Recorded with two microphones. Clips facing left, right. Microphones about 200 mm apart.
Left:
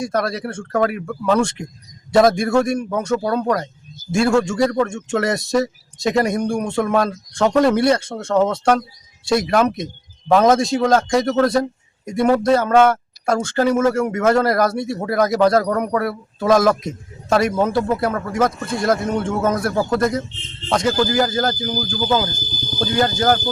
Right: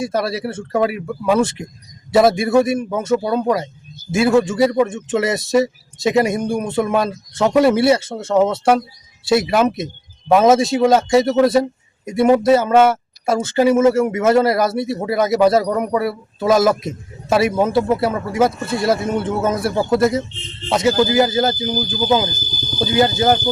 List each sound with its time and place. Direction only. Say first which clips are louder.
0.0 s speech: right 1 dB; 5° right (ahead or behind)
21.8 s speech: right 3 dB; 20° right (ahead or behind)